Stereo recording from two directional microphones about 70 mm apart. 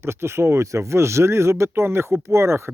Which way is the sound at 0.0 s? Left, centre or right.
Right.